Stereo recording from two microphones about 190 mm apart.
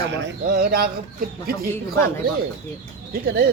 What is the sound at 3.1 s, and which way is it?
Speech, 55° right (ahead or behind).